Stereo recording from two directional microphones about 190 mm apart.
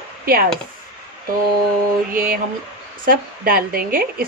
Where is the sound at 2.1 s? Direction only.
45° right (ahead or behind).